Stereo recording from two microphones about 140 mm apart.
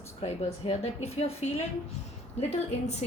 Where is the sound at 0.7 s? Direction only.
50° left (ahead or behind).